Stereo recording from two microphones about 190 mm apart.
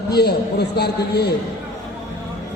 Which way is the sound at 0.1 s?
55° left (ahead or behind).